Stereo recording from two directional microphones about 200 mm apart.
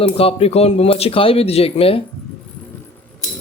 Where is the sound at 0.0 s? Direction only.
30° left (ahead or behind).